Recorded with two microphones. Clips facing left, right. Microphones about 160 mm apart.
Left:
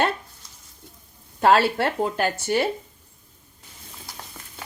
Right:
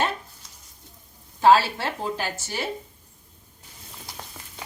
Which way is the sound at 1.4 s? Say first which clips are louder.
Even; 60° left (ahead or behind).